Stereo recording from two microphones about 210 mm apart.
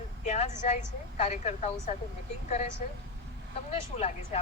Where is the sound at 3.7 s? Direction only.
30° left (ahead or behind).